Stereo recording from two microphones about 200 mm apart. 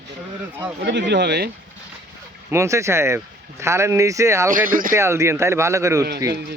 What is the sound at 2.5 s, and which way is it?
Speech, 15° right (ahead or behind).